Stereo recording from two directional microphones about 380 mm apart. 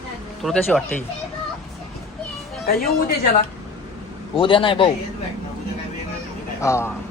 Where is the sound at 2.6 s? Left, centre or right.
Left.